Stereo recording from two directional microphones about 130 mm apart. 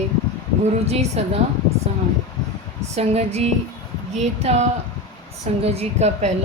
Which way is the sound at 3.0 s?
55° right (ahead or behind).